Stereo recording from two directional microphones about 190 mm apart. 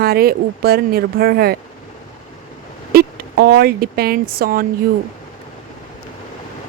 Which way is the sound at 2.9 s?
50° right (ahead or behind).